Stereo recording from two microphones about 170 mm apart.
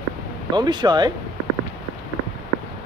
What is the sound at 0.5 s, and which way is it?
Speech, 25° right (ahead or behind).